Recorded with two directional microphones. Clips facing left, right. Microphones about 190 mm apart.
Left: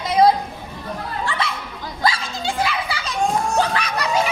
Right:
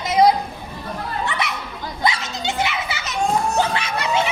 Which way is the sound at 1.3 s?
20° right (ahead or behind).